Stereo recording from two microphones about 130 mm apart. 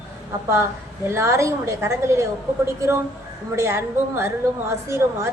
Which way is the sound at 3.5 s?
20° right (ahead or behind).